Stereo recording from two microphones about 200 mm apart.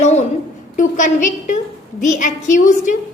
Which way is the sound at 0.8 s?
40° left (ahead or behind).